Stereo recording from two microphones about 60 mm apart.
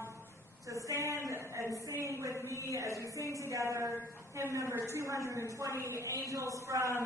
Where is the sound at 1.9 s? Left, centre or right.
Right.